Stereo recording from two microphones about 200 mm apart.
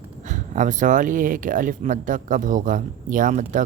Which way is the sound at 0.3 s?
40° right (ahead or behind).